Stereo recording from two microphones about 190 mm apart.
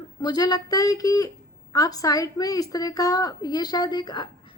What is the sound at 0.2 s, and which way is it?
A woman's voice, 20° left (ahead or behind).